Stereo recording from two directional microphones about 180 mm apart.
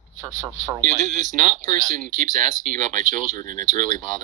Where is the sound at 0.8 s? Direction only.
45° right (ahead or behind).